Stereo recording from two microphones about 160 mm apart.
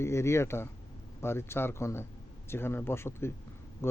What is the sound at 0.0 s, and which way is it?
Speech, 15° left (ahead or behind).